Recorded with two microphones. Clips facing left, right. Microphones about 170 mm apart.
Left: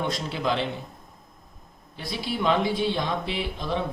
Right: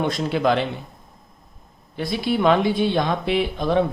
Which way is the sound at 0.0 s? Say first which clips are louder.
Right 7 dB; 60° right (ahead or behind).